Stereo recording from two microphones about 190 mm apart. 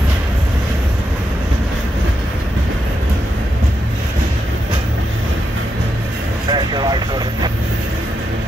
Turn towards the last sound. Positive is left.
turn(degrees=-20)  # may be behind; listen again after turning